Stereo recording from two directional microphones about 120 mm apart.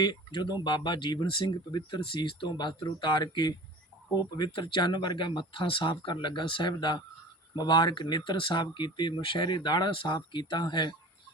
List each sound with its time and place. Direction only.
0.0 s speech: 40° left (ahead or behind)